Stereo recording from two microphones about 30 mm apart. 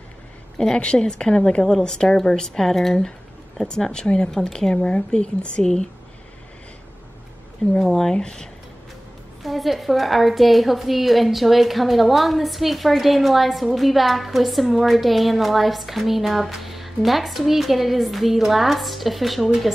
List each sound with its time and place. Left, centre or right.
0.8 s speech: left; by 3.1 s centre
3.6 s speech: left
4.3 s speech: centre
7.9 s speech: centre
9.4 s a woman's voice: centre